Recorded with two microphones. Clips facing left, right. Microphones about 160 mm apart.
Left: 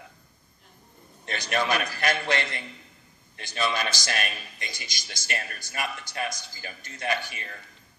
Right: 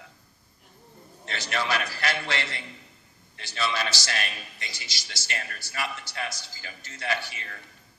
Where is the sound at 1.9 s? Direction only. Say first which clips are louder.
Left 3 dB; 50° left (ahead or behind).